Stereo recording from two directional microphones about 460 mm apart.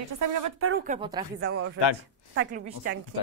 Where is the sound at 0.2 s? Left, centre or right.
Right.